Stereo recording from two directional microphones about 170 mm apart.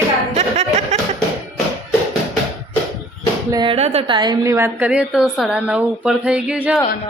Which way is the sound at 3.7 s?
40° right (ahead or behind).